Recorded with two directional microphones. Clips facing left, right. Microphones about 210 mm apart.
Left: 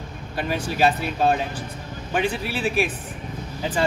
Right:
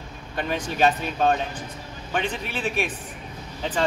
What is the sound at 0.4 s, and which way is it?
Speech, 5° left (ahead or behind).